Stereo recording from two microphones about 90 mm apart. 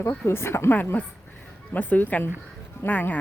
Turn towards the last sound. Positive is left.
turn(degrees=20)  # may be behind; listen again after turning